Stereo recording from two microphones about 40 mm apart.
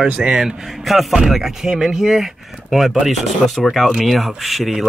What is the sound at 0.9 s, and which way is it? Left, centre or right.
Speech, centre.